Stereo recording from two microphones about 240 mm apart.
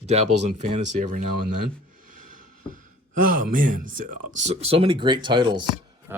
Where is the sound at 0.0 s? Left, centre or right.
Right.